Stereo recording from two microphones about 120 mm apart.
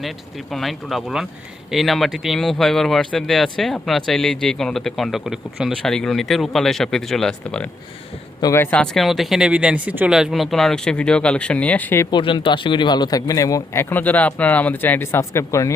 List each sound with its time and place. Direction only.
0.5 s speech: centre (ahead or behind)
10.1 s speech: centre (ahead or behind); by 12.0 s 15° left (ahead or behind)
12.1 s speech: 45° left (ahead or behind); by 13.8 s 30° left (ahead or behind)
13.9 s speech: 15° left (ahead or behind)